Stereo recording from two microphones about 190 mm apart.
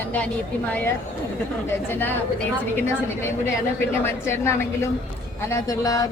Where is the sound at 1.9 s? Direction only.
10° left (ahead or behind).